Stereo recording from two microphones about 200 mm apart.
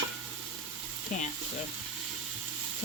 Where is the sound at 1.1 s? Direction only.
40° left (ahead or behind).